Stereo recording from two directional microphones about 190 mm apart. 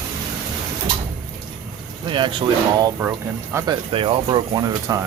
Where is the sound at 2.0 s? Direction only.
25° right (ahead or behind).